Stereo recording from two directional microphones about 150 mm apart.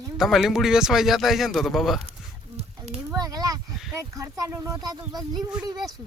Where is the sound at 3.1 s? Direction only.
25° right (ahead or behind).